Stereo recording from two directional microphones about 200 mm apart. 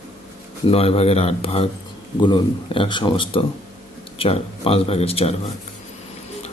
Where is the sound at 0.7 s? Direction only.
30° left (ahead or behind).